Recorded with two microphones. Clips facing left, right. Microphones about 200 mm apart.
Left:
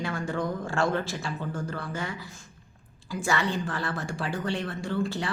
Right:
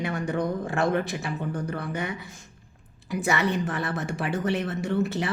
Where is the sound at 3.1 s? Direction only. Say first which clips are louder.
Right 3 dB; 20° right (ahead or behind).